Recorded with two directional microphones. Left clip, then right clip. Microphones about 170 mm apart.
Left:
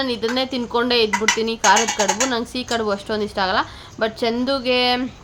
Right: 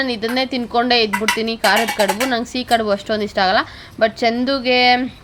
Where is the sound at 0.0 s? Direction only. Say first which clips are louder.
Right 2 dB; 10° right (ahead or behind).